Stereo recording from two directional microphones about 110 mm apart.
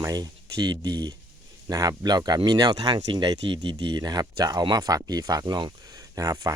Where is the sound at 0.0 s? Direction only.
35° right (ahead or behind).